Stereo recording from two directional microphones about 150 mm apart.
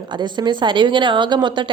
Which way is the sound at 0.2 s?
30° right (ahead or behind).